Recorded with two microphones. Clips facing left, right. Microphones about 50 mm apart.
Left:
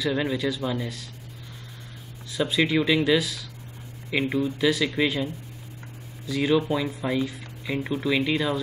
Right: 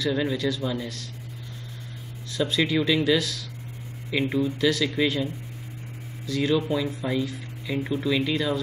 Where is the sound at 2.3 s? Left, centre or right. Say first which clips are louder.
Left 1 dB; centre.